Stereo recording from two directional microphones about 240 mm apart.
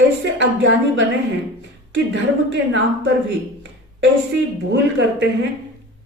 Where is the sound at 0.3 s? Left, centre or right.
Right.